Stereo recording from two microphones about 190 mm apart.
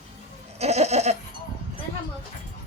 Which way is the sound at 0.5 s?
35° right (ahead or behind).